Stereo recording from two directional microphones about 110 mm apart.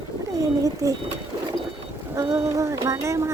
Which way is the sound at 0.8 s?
30° right (ahead or behind).